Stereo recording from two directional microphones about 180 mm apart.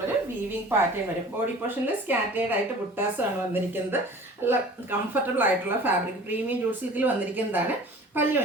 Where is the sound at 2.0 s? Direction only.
10° right (ahead or behind).